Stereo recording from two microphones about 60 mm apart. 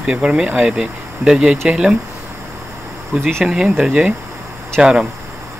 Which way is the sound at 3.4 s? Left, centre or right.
Centre.